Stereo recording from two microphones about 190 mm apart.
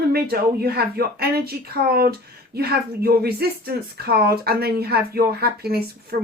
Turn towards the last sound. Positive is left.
turn(degrees=-55)  # may be behind; listen again after turning